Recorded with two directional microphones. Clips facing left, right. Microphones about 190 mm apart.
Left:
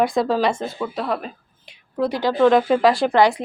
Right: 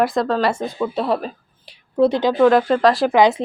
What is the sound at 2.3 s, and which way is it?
Speech, centre (ahead or behind).